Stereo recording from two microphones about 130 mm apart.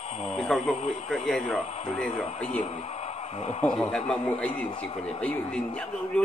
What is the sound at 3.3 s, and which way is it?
Speech, 55° left (ahead or behind).